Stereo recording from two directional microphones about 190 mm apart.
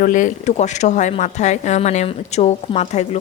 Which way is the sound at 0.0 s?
45° left (ahead or behind).